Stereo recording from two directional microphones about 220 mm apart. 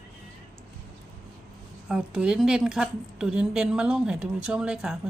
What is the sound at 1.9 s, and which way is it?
A woman's voice, 5° right (ahead or behind).